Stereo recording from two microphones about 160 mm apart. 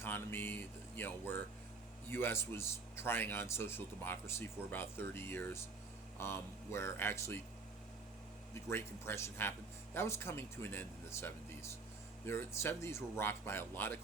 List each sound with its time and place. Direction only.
0.0 s speech: 15° left (ahead or behind)
8.5 s speech: 15° left (ahead or behind)